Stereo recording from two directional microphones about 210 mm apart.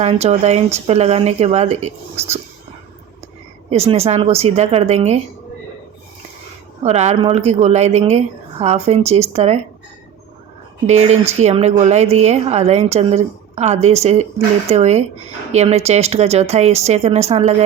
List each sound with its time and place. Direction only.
0.0 s a woman's voice: 30° right (ahead or behind)
3.7 s a woman's voice: 30° right (ahead or behind)
6.8 s a woman's voice: 30° right (ahead or behind)
10.8 s a woman's voice: 30° right (ahead or behind)